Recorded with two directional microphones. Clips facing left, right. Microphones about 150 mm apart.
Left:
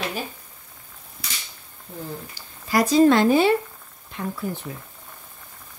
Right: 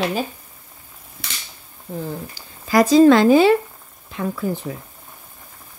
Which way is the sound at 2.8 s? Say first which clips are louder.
Right 5 dB; 90° right.